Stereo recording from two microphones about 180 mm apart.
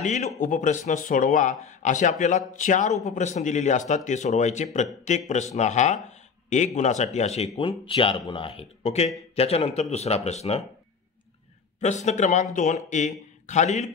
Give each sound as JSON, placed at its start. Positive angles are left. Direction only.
{"t": 0.0, "sound": "speech", "side_deg": 45}
{"t": 11.8, "sound": "speech", "side_deg": 40}